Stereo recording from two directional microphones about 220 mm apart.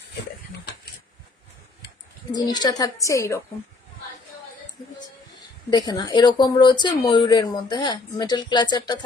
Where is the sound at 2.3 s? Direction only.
20° left (ahead or behind).